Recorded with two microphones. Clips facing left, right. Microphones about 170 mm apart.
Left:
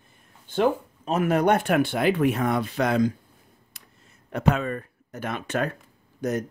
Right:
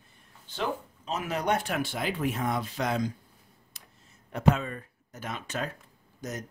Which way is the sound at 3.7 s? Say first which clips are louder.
Left 1 dB; 55° left (ahead or behind).